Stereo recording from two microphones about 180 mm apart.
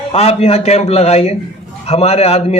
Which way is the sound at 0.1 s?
35° left (ahead or behind).